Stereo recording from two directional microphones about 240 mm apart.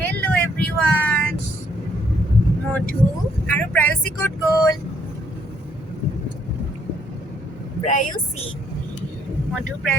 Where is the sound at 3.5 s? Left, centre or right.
Centre.